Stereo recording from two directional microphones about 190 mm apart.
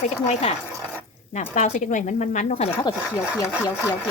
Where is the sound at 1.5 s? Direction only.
40° left (ahead or behind).